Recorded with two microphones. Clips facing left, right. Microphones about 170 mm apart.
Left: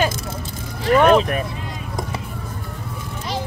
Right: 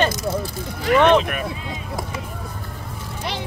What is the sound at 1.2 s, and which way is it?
Speech, 35° left (ahead or behind).